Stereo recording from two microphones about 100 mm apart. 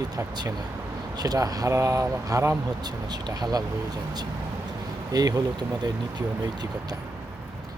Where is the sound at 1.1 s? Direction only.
40° right (ahead or behind).